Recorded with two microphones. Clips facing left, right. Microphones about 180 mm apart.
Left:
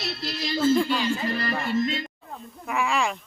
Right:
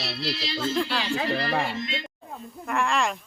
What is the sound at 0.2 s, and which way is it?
Music, 50° left (ahead or behind).